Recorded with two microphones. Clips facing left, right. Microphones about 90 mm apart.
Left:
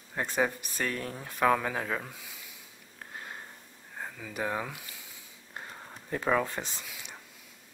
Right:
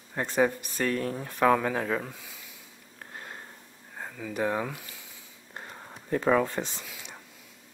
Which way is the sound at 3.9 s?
Centre (ahead or behind).